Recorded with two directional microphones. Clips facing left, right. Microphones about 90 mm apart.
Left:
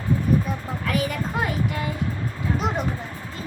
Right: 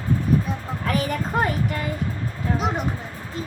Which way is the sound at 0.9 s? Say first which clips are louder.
Right 1 dB; 40° right (ahead or behind).